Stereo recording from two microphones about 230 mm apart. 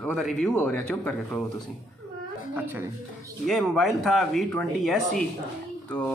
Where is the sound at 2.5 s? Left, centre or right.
Centre.